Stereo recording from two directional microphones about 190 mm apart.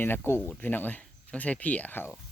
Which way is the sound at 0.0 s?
10° left (ahead or behind).